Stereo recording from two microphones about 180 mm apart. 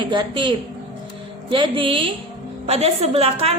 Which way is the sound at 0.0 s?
25° right (ahead or behind).